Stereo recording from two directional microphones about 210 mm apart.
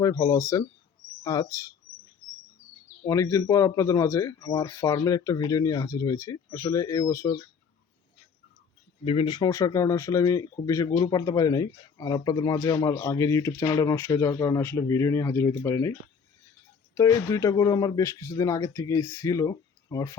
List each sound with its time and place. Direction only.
0.0 s speech: 15° left (ahead or behind)
3.1 s speech: 15° left (ahead or behind)
9.0 s speech: 20° left (ahead or behind)